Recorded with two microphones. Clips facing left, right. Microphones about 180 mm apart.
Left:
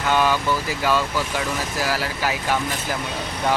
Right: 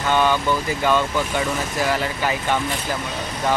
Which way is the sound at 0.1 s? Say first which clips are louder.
Right 1 dB; 5° left (ahead or behind).